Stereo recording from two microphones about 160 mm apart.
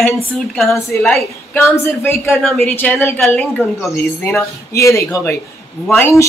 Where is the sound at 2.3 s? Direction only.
Centre (ahead or behind).